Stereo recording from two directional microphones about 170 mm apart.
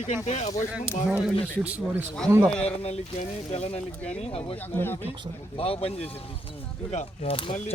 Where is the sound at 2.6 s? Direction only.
40° left (ahead or behind).